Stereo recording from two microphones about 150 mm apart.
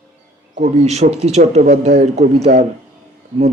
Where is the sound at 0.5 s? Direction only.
50° right (ahead or behind).